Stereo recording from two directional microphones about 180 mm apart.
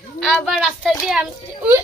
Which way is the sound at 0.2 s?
Centre (ahead or behind).